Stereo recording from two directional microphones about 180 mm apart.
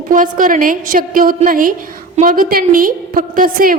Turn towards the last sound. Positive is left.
turn(degrees=-50)  # may be behind; listen again after turning